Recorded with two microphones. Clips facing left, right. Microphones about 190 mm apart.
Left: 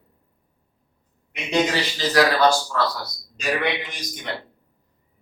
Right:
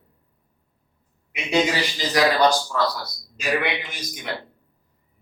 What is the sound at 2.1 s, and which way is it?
Speech, 15° right (ahead or behind).